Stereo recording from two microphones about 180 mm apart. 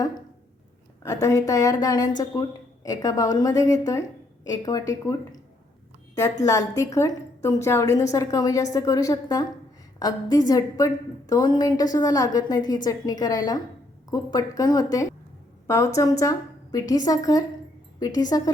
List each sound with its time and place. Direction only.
1.0 s a woman's voice: 15° left (ahead or behind)
6.4 s a woman's voice: 15° left (ahead or behind)